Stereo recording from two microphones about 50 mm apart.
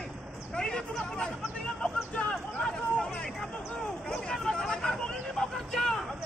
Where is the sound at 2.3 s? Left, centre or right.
Centre.